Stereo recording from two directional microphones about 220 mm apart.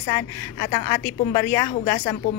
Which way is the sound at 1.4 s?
35° left (ahead or behind).